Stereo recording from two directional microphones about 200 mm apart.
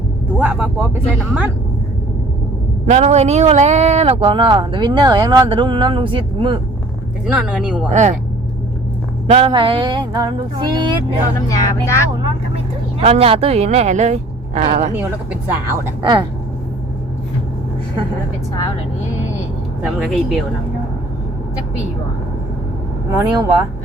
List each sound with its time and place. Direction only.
0.3 s speech: 5° right (ahead or behind)
2.8 s speech: 35° right (ahead or behind)
7.3 s speech: 5° right (ahead or behind)
7.9 s speech: 35° right (ahead or behind)
9.2 s speech: 30° right (ahead or behind)
11.3 s speech: 15° left (ahead or behind)
13.0 s speech: 30° right (ahead or behind)
14.9 s speech: 10° right (ahead or behind)
19.8 s speech: 5° right (ahead or behind)
23.1 s speech: 20° right (ahead or behind)